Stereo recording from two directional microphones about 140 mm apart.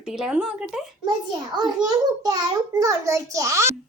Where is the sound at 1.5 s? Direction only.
30° right (ahead or behind).